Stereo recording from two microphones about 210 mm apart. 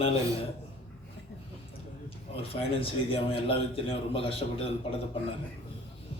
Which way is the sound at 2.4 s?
25° left (ahead or behind).